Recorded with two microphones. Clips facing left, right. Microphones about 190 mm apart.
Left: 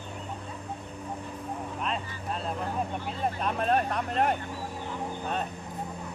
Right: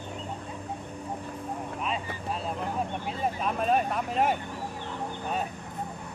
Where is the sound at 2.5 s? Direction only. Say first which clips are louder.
Even; 15° right (ahead or behind).